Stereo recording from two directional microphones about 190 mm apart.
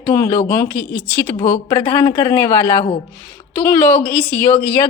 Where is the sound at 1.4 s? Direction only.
20° left (ahead or behind).